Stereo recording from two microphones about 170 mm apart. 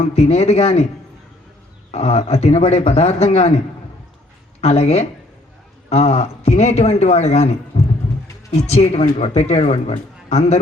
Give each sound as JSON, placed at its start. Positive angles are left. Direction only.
{"t": 0.0, "sound": "speech", "side_deg": 35}
{"t": 1.9, "sound": "speech", "side_deg": 40}
{"t": 4.6, "sound": "speech", "side_deg": 40}